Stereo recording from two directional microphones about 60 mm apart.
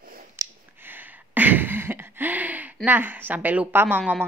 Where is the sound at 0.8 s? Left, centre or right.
Right.